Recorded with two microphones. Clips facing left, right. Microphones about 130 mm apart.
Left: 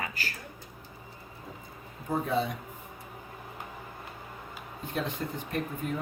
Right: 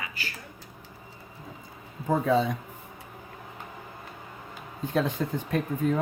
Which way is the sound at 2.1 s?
90° right.